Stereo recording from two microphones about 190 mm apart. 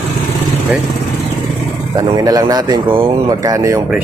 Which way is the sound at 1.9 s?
20° right (ahead or behind).